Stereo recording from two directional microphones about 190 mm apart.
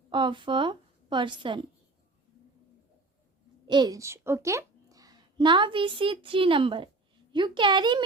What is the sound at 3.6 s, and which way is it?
A woman's voice, 25° right (ahead or behind).